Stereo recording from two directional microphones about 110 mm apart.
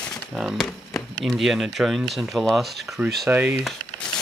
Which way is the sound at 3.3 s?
15° right (ahead or behind).